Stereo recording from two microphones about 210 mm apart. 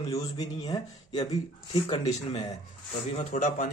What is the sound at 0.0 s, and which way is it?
Speech, 15° left (ahead or behind).